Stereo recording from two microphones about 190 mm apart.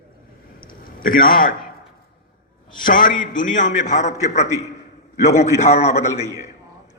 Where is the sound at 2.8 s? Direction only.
45° left (ahead or behind).